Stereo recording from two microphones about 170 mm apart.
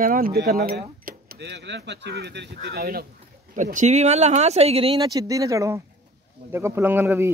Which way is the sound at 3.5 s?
50° right (ahead or behind).